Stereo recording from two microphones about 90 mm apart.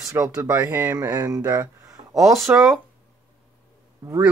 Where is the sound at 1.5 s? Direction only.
40° right (ahead or behind).